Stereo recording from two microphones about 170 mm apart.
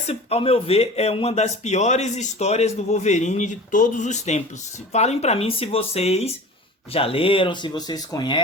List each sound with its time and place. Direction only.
0.1 s speech: 35° left (ahead or behind)